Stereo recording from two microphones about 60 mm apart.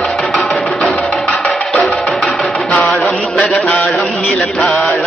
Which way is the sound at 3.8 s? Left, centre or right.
Centre.